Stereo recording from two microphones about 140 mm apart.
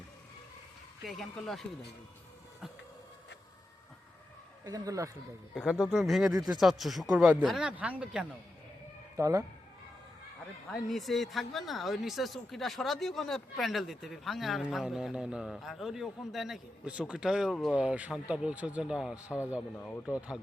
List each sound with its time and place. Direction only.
1.0 s speech: centre (ahead or behind)
4.6 s speech: 25° right (ahead or behind)
5.8 s speech: centre (ahead or behind)
9.1 s speech: 20° right (ahead or behind)
10.7 s speech: centre (ahead or behind)
17.7 s speech: 10° right (ahead or behind)
19.7 s speech: 10° left (ahead or behind)